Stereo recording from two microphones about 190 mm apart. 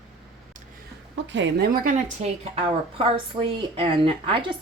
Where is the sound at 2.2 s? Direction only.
35° right (ahead or behind).